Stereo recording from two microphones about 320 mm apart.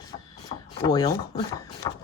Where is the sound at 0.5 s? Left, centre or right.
Left.